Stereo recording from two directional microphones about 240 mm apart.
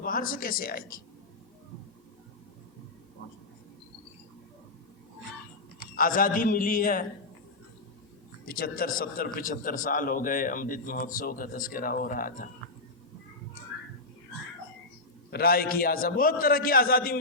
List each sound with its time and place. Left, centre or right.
0.0 s a man's voice: left
6.0 s a man's voice: left
8.4 s a man's voice: left
15.3 s a man's voice: left